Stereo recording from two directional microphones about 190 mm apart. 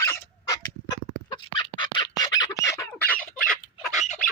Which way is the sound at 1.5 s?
25° left (ahead or behind).